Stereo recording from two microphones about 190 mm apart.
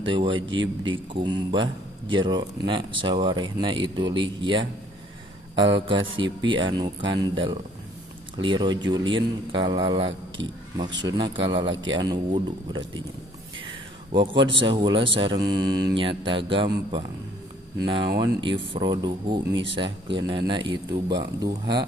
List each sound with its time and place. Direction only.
0.0 s speech: 25° right (ahead or behind)